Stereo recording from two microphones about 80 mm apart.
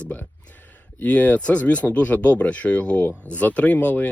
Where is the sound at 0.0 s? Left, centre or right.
Centre.